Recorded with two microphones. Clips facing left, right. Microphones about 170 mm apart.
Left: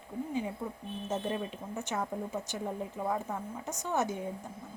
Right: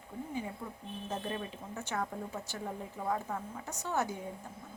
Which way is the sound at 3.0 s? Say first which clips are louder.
Even; 10° left (ahead or behind).